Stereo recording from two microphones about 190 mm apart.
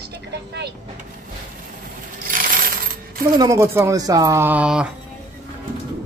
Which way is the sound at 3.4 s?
15° right (ahead or behind).